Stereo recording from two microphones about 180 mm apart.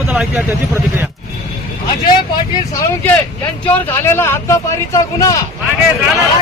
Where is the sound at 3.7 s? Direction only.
10° left (ahead or behind).